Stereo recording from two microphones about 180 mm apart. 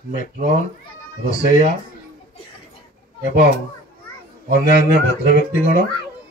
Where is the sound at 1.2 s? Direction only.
45° left (ahead or behind).